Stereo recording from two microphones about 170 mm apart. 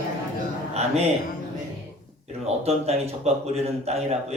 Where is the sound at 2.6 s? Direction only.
35° right (ahead or behind).